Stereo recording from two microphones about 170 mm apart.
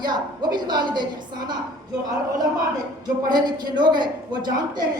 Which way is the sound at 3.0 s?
25° right (ahead or behind).